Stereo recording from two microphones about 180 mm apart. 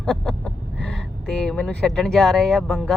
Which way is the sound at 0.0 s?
Centre (ahead or behind).